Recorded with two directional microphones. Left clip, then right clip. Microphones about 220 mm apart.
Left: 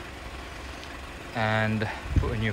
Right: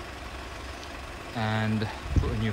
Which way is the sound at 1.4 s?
15° right (ahead or behind).